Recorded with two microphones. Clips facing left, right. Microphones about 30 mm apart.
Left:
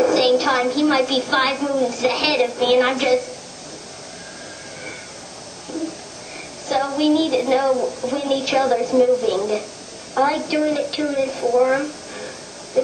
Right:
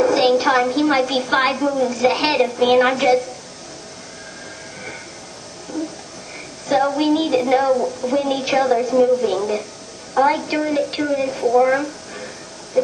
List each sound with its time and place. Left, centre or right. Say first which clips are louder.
0.1 s a woman's voice: right 1 dB; centre
1.6 s a woman's voice: right 2 dB; centre
5.7 s a sound: right 2 dB; left
6.7 s a woman's voice: right 1 dB; centre
7.4 s a woman's voice: right 1 dB; centre
7.7 s a woman's voice: right 2 dB; centre
8.1 s a woman's voice: right 2 dB; centre
11.0 s a woman's voice: right 1 dB; centre
12.7 s a sound: right 1 dB; centre